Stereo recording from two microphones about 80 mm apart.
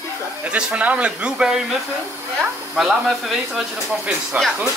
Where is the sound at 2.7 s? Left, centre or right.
Centre.